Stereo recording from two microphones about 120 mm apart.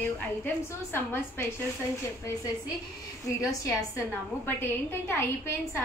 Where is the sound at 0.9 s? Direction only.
20° left (ahead or behind).